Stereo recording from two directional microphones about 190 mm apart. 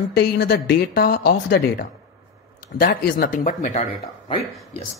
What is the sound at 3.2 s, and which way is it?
Speech, 40° left (ahead or behind).